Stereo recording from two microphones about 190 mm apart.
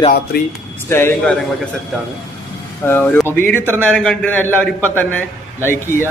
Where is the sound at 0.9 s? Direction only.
10° left (ahead or behind).